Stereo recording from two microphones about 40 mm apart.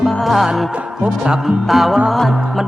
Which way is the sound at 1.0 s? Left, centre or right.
Centre.